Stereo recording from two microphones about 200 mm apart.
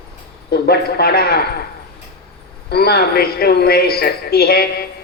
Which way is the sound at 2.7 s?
50° left (ahead or behind).